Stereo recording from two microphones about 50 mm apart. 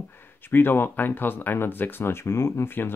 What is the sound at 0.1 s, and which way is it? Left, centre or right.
Speech, left.